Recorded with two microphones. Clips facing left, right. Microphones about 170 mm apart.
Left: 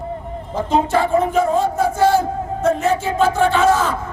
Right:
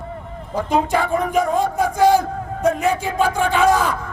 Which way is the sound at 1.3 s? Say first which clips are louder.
Left 2 dB; 15° right (ahead or behind).